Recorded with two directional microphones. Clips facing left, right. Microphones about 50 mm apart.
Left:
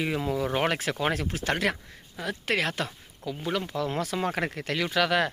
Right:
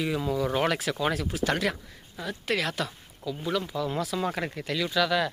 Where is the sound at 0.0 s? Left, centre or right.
Left.